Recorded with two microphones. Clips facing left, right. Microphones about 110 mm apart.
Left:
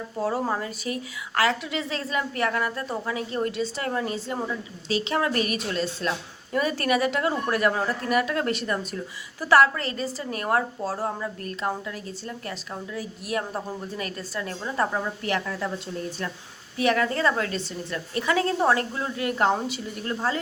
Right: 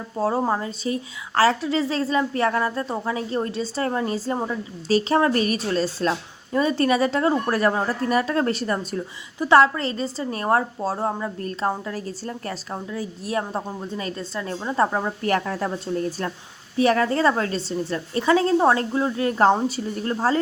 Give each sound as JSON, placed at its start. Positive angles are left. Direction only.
{"t": 0.2, "sound": "a woman's voice", "side_deg": -25}
{"t": 15.3, "sound": "a woman's voice", "side_deg": -40}
{"t": 16.7, "sound": "a woman's voice", "side_deg": -35}